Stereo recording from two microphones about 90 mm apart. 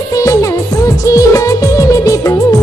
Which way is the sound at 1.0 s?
40° left (ahead or behind).